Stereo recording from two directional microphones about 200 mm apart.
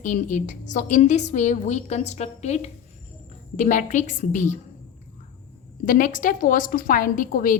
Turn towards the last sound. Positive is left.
turn(degrees=45)  # may be behind; listen again after turning